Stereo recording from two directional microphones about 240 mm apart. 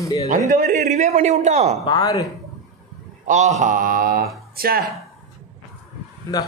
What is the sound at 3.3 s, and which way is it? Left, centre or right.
Speech, right.